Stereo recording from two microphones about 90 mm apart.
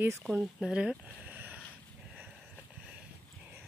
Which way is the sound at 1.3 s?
20° right (ahead or behind).